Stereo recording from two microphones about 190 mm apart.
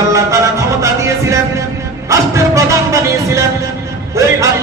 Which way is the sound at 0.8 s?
15° right (ahead or behind).